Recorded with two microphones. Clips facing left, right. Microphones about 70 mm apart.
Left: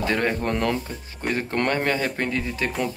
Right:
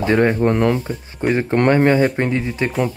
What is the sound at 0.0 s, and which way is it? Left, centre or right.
Speech, right.